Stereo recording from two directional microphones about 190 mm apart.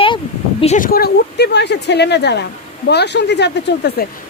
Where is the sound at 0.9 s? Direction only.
55° left (ahead or behind).